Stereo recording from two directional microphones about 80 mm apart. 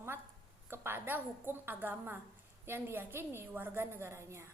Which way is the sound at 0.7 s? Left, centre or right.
Right.